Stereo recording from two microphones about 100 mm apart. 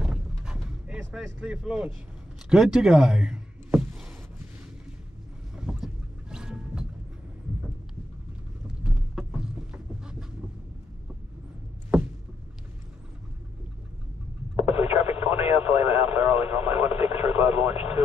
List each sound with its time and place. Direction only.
0.0 s a sound: 5° right (ahead or behind)
1.4 s speech: 10° right (ahead or behind)
2.5 s a sound: 5° right (ahead or behind)
5.6 s boat: 5° right (ahead or behind)
8.6 s vehicle: 5° right (ahead or behind)
14.6 s radio: 75° left (ahead or behind)